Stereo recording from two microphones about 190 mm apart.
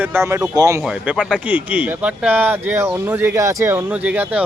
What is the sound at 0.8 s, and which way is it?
Speech, 5° right (ahead or behind).